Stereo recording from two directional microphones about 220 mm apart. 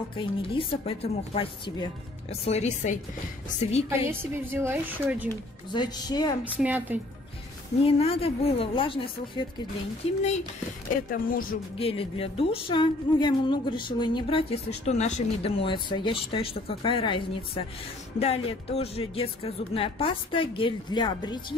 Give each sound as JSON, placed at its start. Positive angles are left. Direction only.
{"t": 0.1, "sound": "a woman's voice", "side_deg": 25}
{"t": 4.1, "sound": "a woman's voice", "side_deg": -10}
{"t": 5.3, "sound": "a woman's voice", "side_deg": 20}
{"t": 6.4, "sound": "a woman's voice", "side_deg": -5}
{"t": 7.8, "sound": "a woman's voice", "side_deg": 25}
{"t": 11.1, "sound": "speech", "side_deg": 40}
{"t": 11.8, "sound": "a woman's voice", "side_deg": 25}